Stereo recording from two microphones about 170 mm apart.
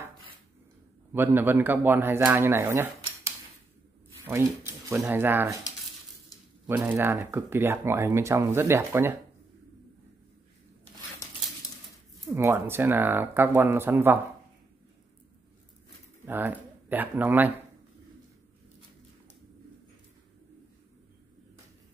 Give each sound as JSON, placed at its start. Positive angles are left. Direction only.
{"t": 1.1, "sound": "speech", "side_deg": -10}
{"t": 6.7, "sound": "speech", "side_deg": -10}
{"t": 12.3, "sound": "speech", "side_deg": -15}
{"t": 16.3, "sound": "speech", "side_deg": -10}